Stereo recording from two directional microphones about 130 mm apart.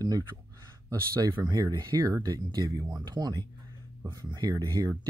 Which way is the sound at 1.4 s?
30° right (ahead or behind).